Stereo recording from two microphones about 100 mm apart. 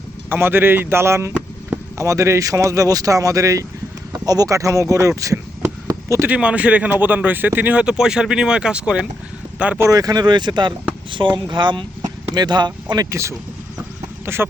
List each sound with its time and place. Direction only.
0.3 s speech: 20° right (ahead or behind)
5.9 s chop: 30° right (ahead or behind)
6.2 s speech: 10° right (ahead or behind)
9.7 s speech: 30° right (ahead or behind)
13.1 s speech: 30° right (ahead or behind)